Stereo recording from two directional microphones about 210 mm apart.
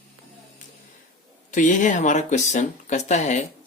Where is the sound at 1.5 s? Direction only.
35° left (ahead or behind).